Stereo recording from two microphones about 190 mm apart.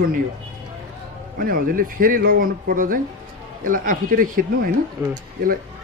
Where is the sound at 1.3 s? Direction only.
50° right (ahead or behind).